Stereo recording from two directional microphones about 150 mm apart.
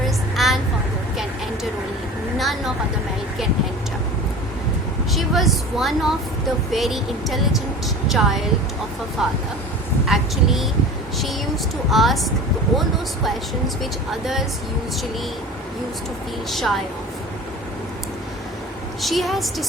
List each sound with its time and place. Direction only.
0.3 s a sound: centre (ahead or behind)
2.4 s vehicle: centre (ahead or behind)
5.1 s speech: centre (ahead or behind)
11.9 s speech: centre (ahead or behind)
14.1 s speech: centre (ahead or behind)
16.5 s speech: centre (ahead or behind)
19.0 s speech: centre (ahead or behind)